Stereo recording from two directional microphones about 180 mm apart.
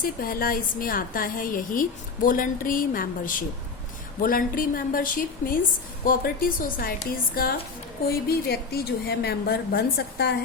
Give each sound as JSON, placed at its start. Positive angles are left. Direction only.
{"t": 0.0, "sound": "a woman's voice", "side_deg": 55}